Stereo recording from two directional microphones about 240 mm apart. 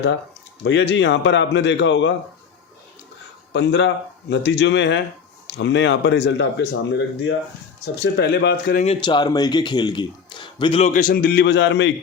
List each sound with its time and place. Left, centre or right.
0.6 s speech: left
3.5 s speech: left
8.8 s speech: left